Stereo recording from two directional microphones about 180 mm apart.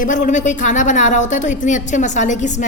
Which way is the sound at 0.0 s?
45° left (ahead or behind).